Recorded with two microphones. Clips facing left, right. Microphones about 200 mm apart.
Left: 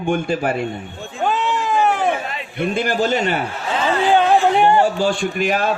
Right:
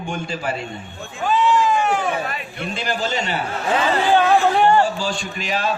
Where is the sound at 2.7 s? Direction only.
55° left (ahead or behind).